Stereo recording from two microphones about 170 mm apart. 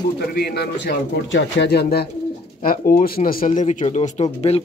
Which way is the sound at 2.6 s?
55° left (ahead or behind).